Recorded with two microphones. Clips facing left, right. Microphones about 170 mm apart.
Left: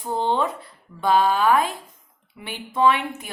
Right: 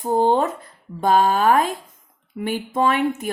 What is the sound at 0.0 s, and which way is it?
A woman's voice, 45° right (ahead or behind).